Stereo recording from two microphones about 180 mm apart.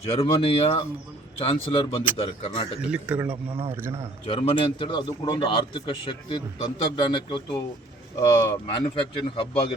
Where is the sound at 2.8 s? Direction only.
5° right (ahead or behind).